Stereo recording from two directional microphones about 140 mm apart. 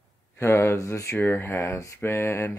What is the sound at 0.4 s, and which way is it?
Speech, 20° left (ahead or behind).